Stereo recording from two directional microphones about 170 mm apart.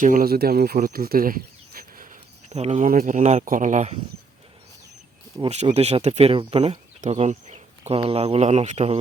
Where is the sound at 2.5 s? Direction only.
40° right (ahead or behind).